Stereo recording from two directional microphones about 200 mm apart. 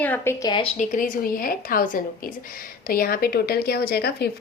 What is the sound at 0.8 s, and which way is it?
A woman's voice, 40° left (ahead or behind).